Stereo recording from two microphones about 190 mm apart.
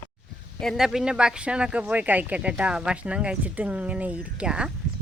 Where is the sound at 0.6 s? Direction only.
Centre (ahead or behind).